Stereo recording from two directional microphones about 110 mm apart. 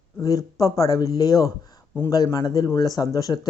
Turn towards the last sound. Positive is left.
turn(degrees=35)  # may be behind; listen again after turning